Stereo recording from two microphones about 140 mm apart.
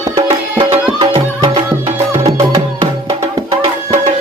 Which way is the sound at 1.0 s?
40° right (ahead or behind).